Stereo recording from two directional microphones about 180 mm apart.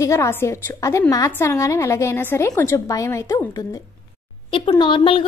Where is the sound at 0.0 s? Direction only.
15° left (ahead or behind).